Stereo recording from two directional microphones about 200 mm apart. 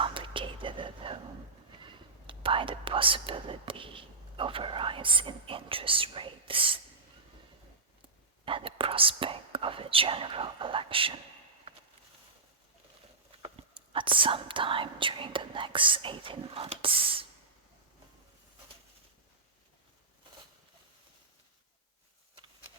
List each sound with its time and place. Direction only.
0.0 s whispering: 25° right (ahead or behind)
2.2 s speech: 25° right (ahead or behind)
8.4 s whispering: 25° right (ahead or behind)
13.4 s speech: 25° right (ahead or behind)